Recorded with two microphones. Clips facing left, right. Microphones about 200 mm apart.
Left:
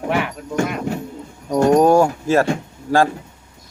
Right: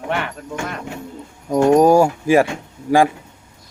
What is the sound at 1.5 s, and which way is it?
Speech, 5° right (ahead or behind).